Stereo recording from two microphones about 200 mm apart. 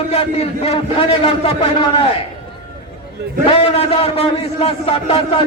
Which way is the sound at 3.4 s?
30° left (ahead or behind).